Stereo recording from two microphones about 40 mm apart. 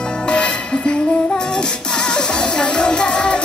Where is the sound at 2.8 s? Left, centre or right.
Left.